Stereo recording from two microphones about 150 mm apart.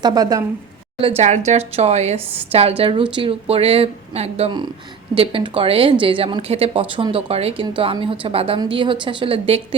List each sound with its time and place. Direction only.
0.0 s speech: 25° right (ahead or behind)
1.0 s a woman's voice: 45° right (ahead or behind)